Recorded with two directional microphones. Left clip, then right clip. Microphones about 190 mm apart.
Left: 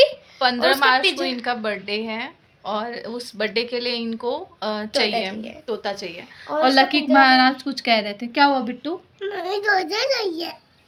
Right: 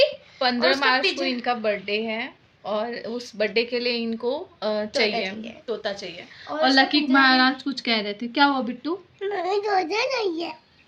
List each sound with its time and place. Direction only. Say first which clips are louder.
0.3 s a woman's voice: left 3 dB; 10° right (ahead or behind)
5.6 s a woman's voice: left 1 dB; 5° left (ahead or behind)
5.9 s a woman's voice: left 3 dB; 20° left (ahead or behind)
9.2 s a child's voice: left 2 dB; 5° right (ahead or behind)